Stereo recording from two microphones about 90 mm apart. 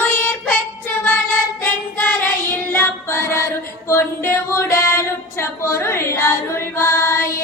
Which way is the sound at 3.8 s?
25° left (ahead or behind).